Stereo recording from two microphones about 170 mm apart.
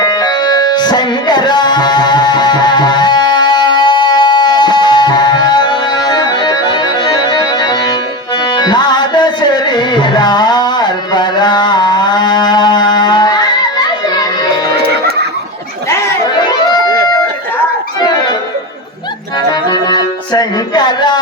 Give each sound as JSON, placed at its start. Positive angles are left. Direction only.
{"t": 0.0, "sound": "music", "side_deg": 25}
{"t": 19.7, "sound": "music", "side_deg": 25}